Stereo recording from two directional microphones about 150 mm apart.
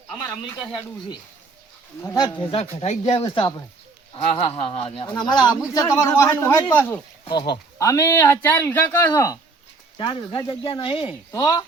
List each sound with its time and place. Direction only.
2.0 s speech: 30° left (ahead or behind); by 3.2 s 45° left (ahead or behind)
3.2 s a man's voice: 35° left (ahead or behind)
10.0 s speech: 30° left (ahead or behind)
11.3 s a man's voice: 25° left (ahead or behind)